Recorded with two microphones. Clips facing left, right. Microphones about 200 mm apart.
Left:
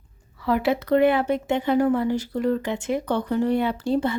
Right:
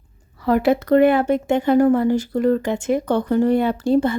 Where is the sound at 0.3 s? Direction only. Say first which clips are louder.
Right 5 dB; 45° right (ahead or behind).